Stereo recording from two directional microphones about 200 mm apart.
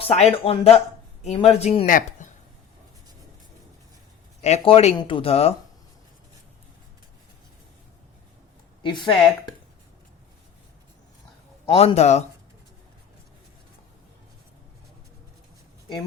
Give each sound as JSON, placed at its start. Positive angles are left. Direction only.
{"t": 0.0, "sound": "speech", "side_deg": 30}
{"t": 1.9, "sound": "a sound", "side_deg": 40}
{"t": 4.4, "sound": "speech", "side_deg": 35}
{"t": 8.8, "sound": "speech", "side_deg": 25}
{"t": 11.7, "sound": "speech", "side_deg": 25}